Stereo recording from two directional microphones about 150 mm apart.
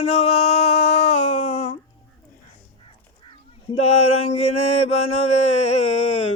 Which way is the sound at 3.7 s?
45° left (ahead or behind).